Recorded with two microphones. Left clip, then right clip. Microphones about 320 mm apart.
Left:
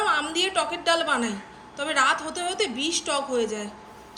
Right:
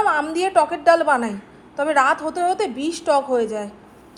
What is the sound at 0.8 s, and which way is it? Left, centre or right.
Speech, centre.